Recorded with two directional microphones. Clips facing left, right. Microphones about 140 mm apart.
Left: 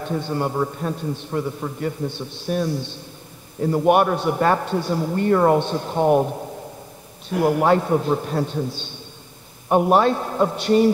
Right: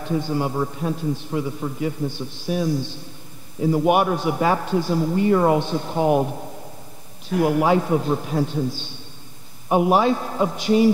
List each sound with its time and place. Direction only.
0.2 s a man's voice: 10° right (ahead or behind)
7.4 s a man's voice: 5° right (ahead or behind)